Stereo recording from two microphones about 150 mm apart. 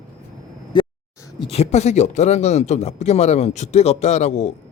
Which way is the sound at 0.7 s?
30° left (ahead or behind).